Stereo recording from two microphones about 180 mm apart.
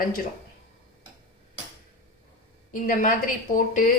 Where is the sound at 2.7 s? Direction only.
45° left (ahead or behind).